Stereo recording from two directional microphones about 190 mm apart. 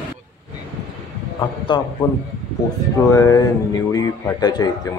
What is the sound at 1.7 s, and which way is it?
Speech, 25° left (ahead or behind).